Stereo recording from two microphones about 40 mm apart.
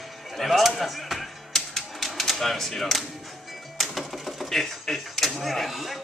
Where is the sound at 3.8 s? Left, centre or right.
Centre.